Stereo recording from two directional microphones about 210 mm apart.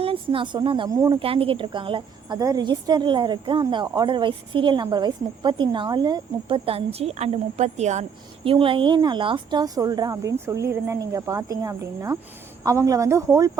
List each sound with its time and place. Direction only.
0.0 s a woman's voice: 25° right (ahead or behind)
1.2 s a woman's voice: 25° right (ahead or behind)